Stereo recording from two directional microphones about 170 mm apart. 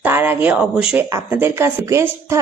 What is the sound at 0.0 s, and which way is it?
A woman's voice, 10° right (ahead or behind).